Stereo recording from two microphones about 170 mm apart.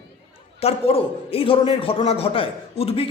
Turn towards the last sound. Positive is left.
turn(degrees=35)  # may be behind; listen again after turning